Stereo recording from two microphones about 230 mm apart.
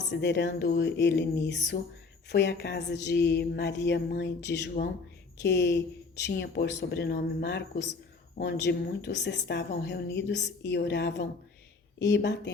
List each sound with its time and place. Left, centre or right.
0.1 s a woman's voice: left